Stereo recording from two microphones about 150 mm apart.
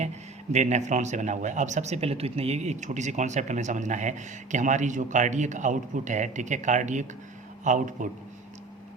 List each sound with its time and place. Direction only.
0.5 s a man's voice: 50° right (ahead or behind)